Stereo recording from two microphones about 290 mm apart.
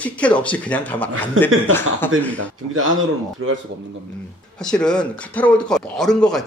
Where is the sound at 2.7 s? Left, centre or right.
Right.